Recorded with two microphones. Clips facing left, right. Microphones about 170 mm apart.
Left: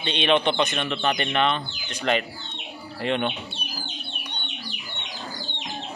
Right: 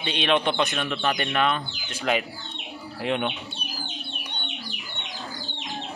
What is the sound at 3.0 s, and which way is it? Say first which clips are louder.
Speech: left 1 dB; centre (ahead or behind).